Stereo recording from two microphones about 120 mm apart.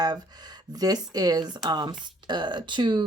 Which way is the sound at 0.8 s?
35° right (ahead or behind).